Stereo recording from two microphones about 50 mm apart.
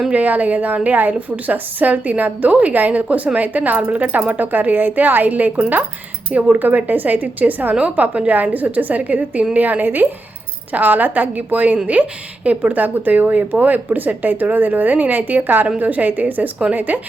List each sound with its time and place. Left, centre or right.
0.1 s a woman's voice: right